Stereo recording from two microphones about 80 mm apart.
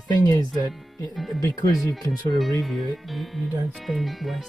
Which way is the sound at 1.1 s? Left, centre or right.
Centre.